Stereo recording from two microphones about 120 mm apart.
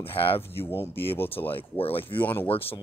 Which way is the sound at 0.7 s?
20° left (ahead or behind).